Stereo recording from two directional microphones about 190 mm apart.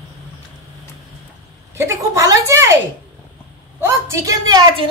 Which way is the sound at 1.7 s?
15° right (ahead or behind).